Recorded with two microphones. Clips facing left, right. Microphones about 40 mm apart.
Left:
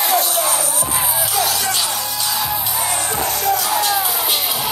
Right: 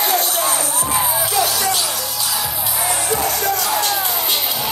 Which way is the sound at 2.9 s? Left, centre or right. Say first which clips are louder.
Right 3 dB; centre.